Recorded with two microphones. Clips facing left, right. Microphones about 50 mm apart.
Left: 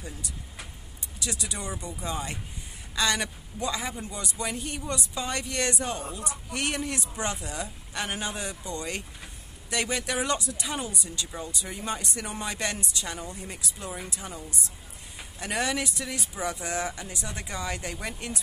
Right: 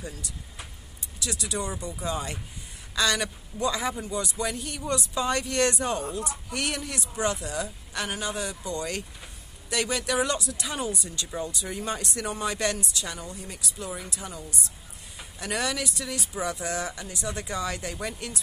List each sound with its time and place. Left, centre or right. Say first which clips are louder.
1.2 s a man's voice: right 3 dB; centre
4.9 s speech: right 7 dB; centre
6.6 s a man's voice: left 2 dB; centre
8.1 s speech: right 2 dB; left
9.7 s a man's voice: right 2 dB; centre
13.1 s a man's voice: left 1 dB; centre
16.3 s a man's voice: right 1 dB; centre